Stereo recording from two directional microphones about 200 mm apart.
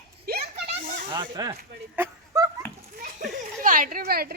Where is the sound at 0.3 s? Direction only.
50° right (ahead or behind).